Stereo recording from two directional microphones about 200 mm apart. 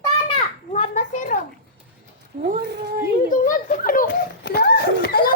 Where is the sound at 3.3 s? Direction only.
45° left (ahead or behind).